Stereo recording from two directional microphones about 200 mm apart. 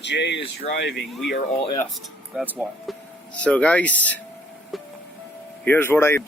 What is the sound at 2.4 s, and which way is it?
Speech, 5° right (ahead or behind).